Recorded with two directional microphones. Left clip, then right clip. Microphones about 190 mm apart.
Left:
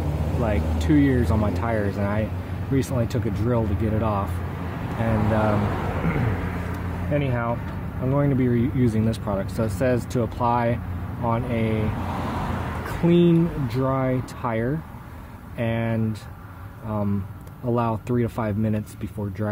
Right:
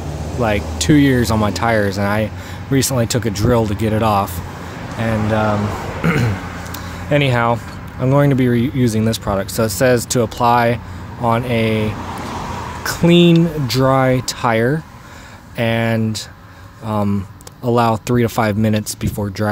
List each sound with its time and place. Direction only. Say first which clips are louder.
0.4 s speech: right 9 dB; 35° right (ahead or behind)
7.1 s speech: right 11 dB; 50° right (ahead or behind); by 11.8 s 35° right (ahead or behind)
13.0 s speech: right 7 dB; 35° right (ahead or behind)